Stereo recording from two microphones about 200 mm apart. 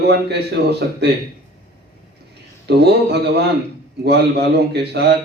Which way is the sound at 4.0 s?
55° right (ahead or behind).